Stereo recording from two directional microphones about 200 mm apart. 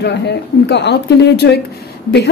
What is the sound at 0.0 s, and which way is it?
Speech, 60° left (ahead or behind).